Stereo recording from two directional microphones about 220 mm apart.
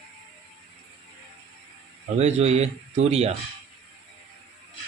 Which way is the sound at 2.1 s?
30° right (ahead or behind).